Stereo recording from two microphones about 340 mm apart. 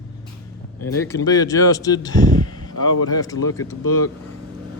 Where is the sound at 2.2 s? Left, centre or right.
Right.